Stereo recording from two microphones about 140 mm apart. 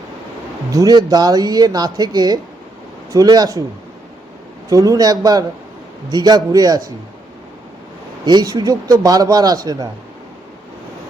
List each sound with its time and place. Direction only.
0.7 s speech: 25° right (ahead or behind)
4.7 s speech: 25° right (ahead or behind)
8.2 s speech: 30° right (ahead or behind)